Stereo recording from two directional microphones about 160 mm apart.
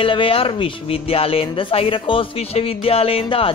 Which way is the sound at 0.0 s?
35° left (ahead or behind).